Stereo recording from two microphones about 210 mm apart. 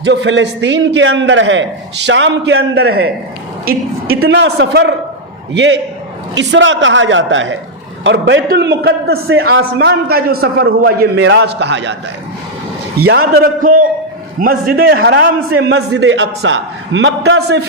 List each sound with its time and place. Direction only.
0.0 s a man's voice: 55° right (ahead or behind)
3.7 s a man's voice: 45° right (ahead or behind)
4.2 s a man's voice: 60° right (ahead or behind)
13.1 s a man's voice: 50° right (ahead or behind)
14.9 s a man's voice: 65° right (ahead or behind)